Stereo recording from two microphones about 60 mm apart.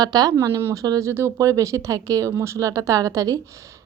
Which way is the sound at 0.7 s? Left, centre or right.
Right.